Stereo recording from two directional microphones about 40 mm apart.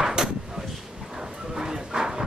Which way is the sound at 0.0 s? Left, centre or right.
Centre.